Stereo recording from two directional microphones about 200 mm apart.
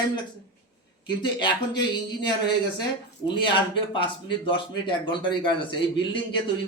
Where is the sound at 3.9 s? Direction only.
25° left (ahead or behind).